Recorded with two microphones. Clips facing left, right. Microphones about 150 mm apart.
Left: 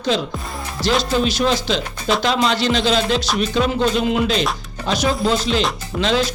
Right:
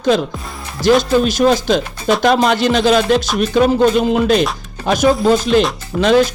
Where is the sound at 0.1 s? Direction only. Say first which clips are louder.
Right 4 dB; 45° right (ahead or behind).